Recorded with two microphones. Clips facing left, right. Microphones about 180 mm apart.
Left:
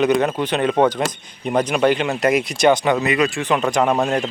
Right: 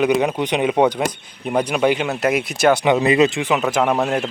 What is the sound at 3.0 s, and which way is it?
Speech, 25° right (ahead or behind).